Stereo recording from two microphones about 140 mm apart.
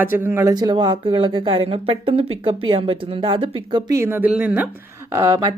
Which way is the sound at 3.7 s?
20° right (ahead or behind).